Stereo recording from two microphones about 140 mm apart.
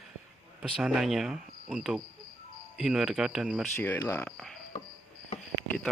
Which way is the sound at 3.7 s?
15° left (ahead or behind).